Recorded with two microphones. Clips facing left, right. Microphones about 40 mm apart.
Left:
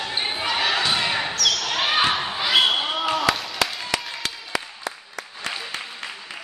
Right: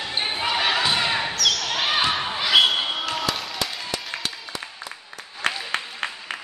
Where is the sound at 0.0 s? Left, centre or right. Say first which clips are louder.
Even; centre.